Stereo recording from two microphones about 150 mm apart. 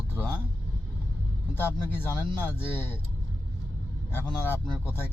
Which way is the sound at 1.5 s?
15° left (ahead or behind).